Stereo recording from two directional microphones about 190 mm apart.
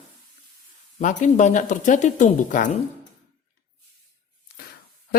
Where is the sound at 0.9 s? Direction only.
40° left (ahead or behind).